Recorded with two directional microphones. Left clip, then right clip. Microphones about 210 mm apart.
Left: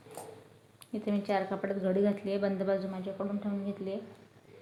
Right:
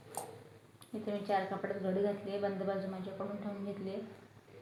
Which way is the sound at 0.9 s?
45° left (ahead or behind).